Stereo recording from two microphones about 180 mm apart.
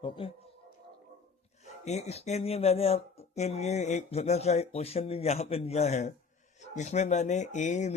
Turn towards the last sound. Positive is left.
turn(degrees=40)  # may be behind; listen again after turning